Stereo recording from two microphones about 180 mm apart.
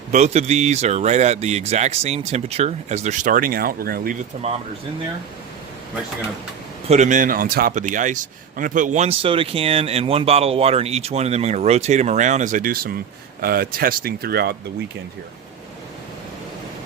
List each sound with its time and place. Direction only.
0.1 s a man's voice: 40° right (ahead or behind)
6.8 s a man's voice: 40° right (ahead or behind); by 14.5 s 60° right (ahead or behind)